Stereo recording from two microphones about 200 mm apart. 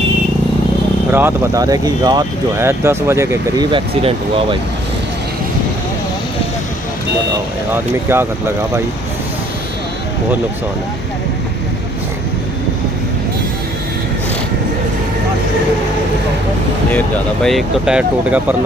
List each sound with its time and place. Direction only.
1.1 s speech: 15° right (ahead or behind)
3.7 s speech: 25° right (ahead or behind)
7.7 s speech: 10° right (ahead or behind)
16.9 s speech: centre (ahead or behind)